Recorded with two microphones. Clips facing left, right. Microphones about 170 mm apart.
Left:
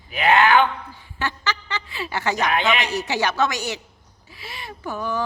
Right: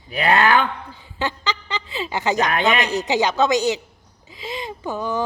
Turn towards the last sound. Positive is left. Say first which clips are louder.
# right 2 dB
turn(degrees=-20)  # may be behind; listen again after turning